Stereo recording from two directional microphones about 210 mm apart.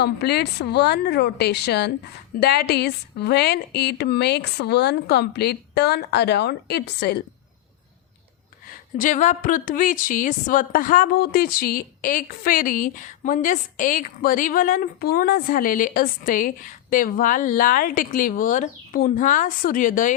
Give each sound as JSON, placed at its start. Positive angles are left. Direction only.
{"t": 0.0, "sound": "speech", "side_deg": 50}
{"t": 9.0, "sound": "speech", "side_deg": 35}